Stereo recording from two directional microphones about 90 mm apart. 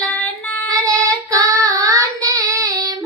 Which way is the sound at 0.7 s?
40° right (ahead or behind).